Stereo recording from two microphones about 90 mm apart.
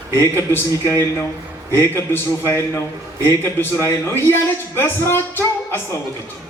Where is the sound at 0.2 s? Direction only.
30° left (ahead or behind).